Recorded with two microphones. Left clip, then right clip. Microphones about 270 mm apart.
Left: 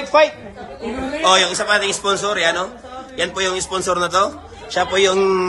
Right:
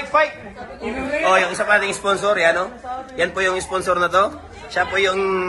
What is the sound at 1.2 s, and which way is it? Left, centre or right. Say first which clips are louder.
A man's voice: left 2 dB; centre.